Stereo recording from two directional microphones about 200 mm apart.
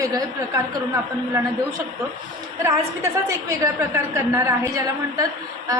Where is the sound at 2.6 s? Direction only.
15° right (ahead or behind).